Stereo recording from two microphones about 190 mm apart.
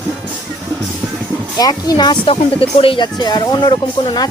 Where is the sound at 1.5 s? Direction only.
20° left (ahead or behind).